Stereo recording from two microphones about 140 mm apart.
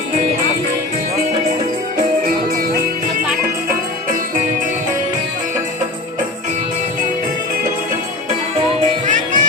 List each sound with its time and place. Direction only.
9.0 s music: 70° right (ahead or behind)